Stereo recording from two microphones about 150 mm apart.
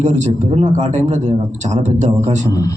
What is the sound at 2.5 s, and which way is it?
Speech, 25° left (ahead or behind).